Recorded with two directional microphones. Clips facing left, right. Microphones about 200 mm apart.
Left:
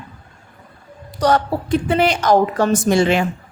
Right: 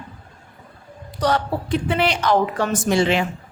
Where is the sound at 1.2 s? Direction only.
45° left (ahead or behind).